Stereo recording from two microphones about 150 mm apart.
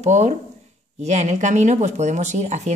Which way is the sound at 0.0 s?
50° right (ahead or behind).